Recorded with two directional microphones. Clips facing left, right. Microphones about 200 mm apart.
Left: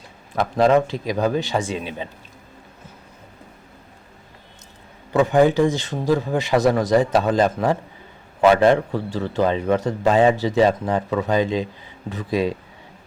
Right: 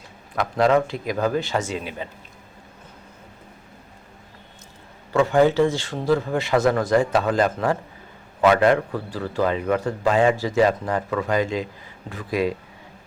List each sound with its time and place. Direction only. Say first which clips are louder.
0.5 s a man's voice: left 2 dB; 20° left (ahead or behind)
5.1 s a man's voice: left 1 dB; 15° left (ahead or behind)